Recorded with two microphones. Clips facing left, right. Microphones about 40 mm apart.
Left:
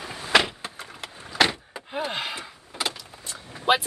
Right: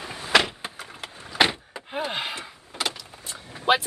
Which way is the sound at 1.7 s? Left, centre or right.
Centre.